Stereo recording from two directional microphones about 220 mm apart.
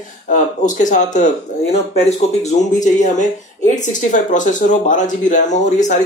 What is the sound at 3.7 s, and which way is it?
Speech, 35° left (ahead or behind).